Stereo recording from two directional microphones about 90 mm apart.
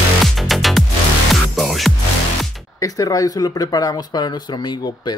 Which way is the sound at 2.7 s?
40° left (ahead or behind).